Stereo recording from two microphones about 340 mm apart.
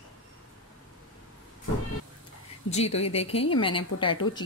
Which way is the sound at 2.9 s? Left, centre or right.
Centre.